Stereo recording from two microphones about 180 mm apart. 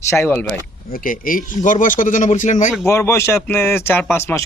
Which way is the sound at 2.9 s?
15° left (ahead or behind).